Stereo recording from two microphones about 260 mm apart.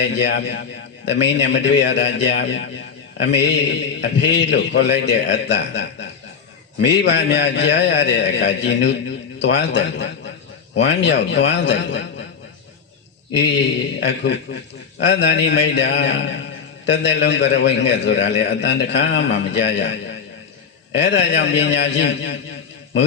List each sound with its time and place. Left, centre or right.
0.0 s a man's voice: left
14.0 s a man's voice: left